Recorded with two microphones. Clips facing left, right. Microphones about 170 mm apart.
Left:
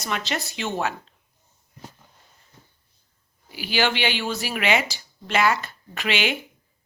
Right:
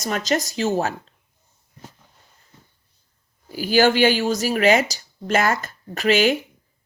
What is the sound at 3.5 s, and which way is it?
Speech, 40° right (ahead or behind).